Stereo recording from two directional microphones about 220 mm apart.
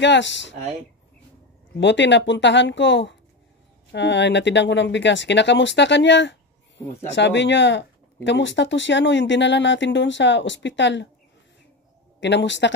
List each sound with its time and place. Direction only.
0.0 s speech: 55° left (ahead or behind)
1.8 s speech: 55° left (ahead or behind)
12.2 s speech: 55° left (ahead or behind)